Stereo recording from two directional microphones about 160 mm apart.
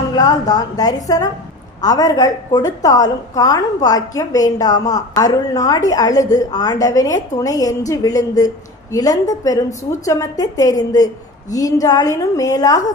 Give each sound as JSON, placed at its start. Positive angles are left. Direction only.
{"t": 0.2, "sound": "a woman's voice", "side_deg": 25}